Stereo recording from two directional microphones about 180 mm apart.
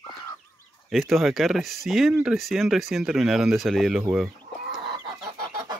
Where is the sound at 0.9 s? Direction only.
Centre (ahead or behind).